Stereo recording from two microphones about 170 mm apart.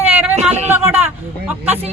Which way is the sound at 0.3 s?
40° right (ahead or behind).